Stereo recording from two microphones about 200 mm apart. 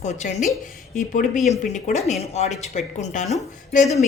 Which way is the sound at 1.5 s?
35° left (ahead or behind).